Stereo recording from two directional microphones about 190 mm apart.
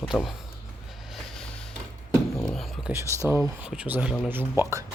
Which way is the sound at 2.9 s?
15° right (ahead or behind).